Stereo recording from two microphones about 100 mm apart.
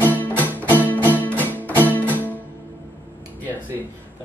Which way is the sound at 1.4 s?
20° left (ahead or behind).